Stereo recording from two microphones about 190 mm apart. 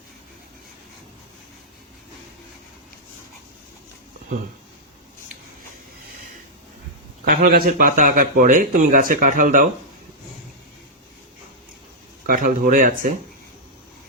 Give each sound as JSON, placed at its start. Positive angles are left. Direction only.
{"t": 7.3, "sound": "speech", "side_deg": -50}
{"t": 12.2, "sound": "speech", "side_deg": -45}